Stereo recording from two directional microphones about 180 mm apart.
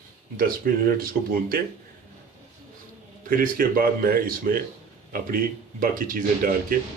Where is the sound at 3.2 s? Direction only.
50° right (ahead or behind).